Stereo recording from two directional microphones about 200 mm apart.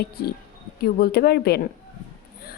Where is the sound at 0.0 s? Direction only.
50° left (ahead or behind).